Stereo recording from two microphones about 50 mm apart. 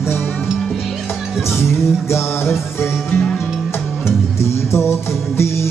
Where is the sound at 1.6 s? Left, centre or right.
Left.